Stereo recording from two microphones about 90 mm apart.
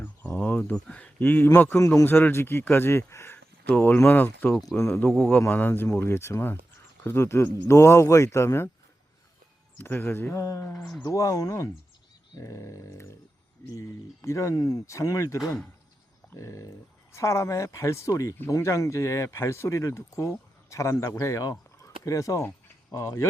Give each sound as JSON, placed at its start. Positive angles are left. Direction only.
{"t": 0.0, "sound": "a sound", "side_deg": 20}
{"t": 1.5, "sound": "speech", "side_deg": 25}
{"t": 9.7, "sound": "speech", "side_deg": 25}
{"t": 10.3, "sound": "speech", "side_deg": 35}